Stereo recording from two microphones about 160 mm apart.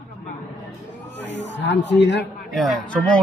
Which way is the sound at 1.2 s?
90° left.